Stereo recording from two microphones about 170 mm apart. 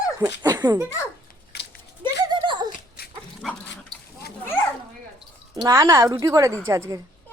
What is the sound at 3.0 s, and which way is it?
Dog, 65° left (ahead or behind).